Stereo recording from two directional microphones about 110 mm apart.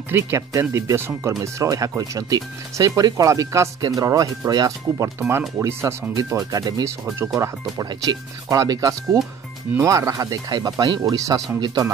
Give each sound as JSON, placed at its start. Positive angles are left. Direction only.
{"t": 0.1, "sound": "speech", "side_deg": -25}